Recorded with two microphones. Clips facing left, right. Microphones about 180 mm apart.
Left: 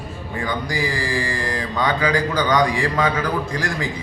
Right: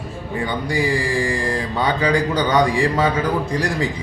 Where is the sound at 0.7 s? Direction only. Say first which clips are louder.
Right 6 dB; 30° right (ahead or behind).